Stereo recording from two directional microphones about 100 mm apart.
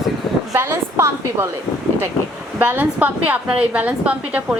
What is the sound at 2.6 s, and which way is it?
A woman's voice, 20° right (ahead or behind).